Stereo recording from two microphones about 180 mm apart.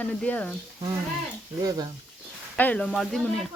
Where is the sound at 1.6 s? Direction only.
20° right (ahead or behind).